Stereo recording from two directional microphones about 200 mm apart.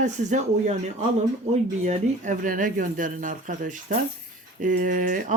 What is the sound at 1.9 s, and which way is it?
Speech, 40° right (ahead or behind).